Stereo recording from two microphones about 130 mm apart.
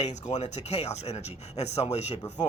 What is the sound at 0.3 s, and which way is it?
A man's voice, 55° left (ahead or behind).